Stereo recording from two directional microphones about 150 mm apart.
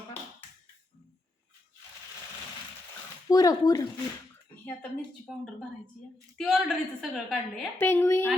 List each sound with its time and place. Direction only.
3.2 s speech: 25° left (ahead or behind)
4.6 s a woman's voice: 5° left (ahead or behind)
7.8 s a woman's voice: 15° left (ahead or behind)